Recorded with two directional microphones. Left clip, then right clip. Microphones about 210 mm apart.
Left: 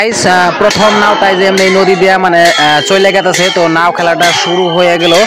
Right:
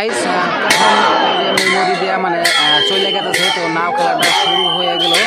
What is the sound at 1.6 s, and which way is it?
Speech, 40° left (ahead or behind).